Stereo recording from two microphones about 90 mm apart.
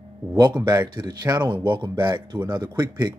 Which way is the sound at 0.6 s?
50° right (ahead or behind).